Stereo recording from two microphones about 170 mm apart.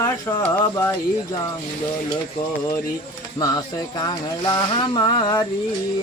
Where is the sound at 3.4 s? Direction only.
20° left (ahead or behind).